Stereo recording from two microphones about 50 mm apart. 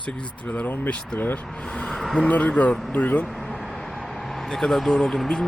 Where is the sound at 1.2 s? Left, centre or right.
Left.